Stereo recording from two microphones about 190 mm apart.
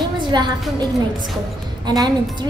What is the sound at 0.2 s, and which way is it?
Speech, 25° right (ahead or behind).